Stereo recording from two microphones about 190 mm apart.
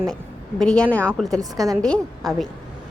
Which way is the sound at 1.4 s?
20° right (ahead or behind).